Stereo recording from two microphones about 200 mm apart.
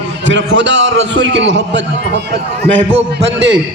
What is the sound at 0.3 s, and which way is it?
A man's voice, 65° right (ahead or behind).